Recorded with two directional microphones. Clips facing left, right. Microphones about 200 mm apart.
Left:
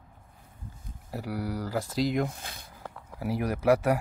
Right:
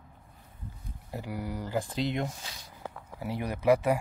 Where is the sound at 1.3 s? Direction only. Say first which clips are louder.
Left 4 dB; 85° left.